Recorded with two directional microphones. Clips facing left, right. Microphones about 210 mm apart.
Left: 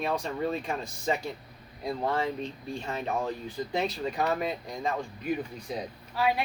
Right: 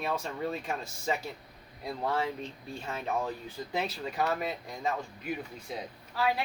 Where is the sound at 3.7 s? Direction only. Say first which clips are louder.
Left 3 dB; 5° right (ahead or behind).